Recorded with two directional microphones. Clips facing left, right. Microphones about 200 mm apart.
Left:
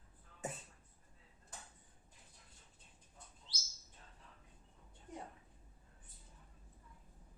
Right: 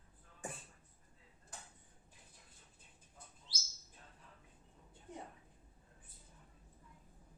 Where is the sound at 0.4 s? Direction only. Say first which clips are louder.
Left 3 dB; 20° left (ahead or behind).